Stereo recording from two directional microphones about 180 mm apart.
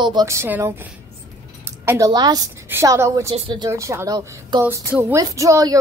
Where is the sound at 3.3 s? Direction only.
35° right (ahead or behind).